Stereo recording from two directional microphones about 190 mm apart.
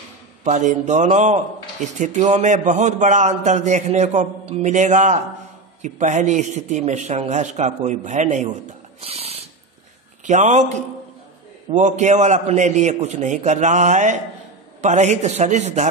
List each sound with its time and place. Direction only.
0.4 s a man's voice: 40° right (ahead or behind)
9.0 s a sound: 30° right (ahead or behind)
10.2 s a man's voice: 40° right (ahead or behind)